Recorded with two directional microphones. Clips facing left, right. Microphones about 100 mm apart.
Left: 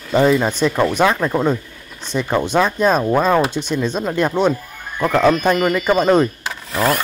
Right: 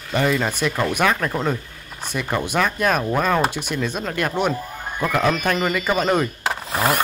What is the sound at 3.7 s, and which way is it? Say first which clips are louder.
Speech: left 5 dB; 20° left (ahead or behind).